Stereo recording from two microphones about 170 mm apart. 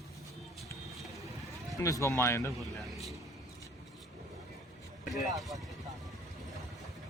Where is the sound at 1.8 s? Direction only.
20° left (ahead or behind).